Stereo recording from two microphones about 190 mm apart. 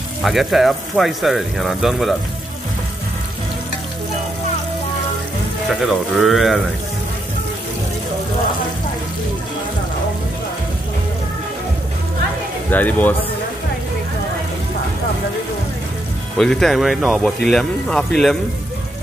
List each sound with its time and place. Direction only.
0.2 s speech: centre (ahead or behind)
5.7 s speech: centre (ahead or behind)
12.6 s speech: 10° left (ahead or behind)
16.3 s speech: centre (ahead or behind)